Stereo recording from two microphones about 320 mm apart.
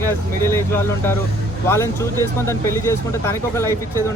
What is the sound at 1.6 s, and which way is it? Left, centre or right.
Speech, centre.